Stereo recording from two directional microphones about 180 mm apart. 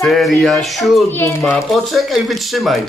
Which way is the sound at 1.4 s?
Centre (ahead or behind).